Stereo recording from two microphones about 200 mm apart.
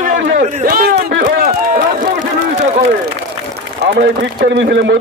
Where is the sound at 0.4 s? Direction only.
45° right (ahead or behind).